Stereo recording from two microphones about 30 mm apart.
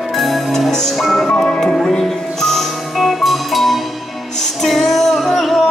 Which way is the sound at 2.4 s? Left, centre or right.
Centre.